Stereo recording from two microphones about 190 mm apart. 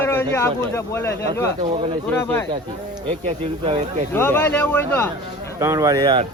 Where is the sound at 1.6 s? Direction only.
25° right (ahead or behind).